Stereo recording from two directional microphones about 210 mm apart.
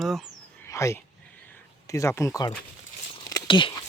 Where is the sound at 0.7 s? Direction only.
15° left (ahead or behind).